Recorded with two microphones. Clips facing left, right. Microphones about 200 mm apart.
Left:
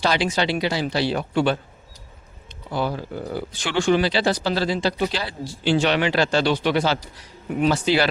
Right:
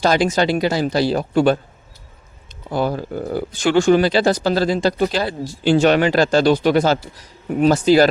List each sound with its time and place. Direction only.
0.0 s speech: 45° right (ahead or behind)
2.6 s speech: 45° right (ahead or behind)